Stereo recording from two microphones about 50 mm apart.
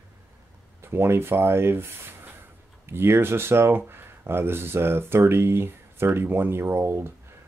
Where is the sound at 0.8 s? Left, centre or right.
Right.